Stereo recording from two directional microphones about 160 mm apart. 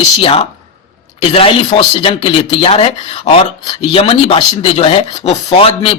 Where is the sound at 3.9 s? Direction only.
35° left (ahead or behind).